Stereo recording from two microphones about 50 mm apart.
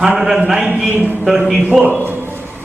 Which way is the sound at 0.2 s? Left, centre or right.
Centre.